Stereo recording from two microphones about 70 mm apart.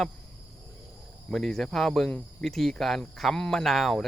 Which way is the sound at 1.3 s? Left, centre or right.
Centre.